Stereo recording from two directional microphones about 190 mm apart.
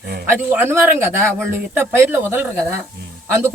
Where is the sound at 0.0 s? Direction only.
55° right (ahead or behind).